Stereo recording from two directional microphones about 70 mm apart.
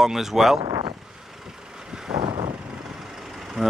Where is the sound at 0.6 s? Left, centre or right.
Right.